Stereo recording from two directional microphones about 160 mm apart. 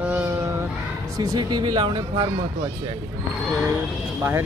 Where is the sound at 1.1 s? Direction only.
20° right (ahead or behind).